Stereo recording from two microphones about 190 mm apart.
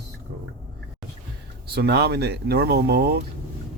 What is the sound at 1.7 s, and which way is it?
Speech, 55° right (ahead or behind).